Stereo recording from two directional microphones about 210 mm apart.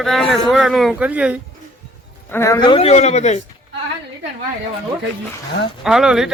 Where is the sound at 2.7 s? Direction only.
30° left (ahead or behind).